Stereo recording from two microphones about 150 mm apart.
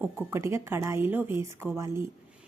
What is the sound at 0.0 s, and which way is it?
A woman's voice, 15° right (ahead or behind).